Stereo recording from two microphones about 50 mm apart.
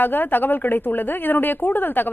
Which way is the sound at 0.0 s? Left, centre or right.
Left.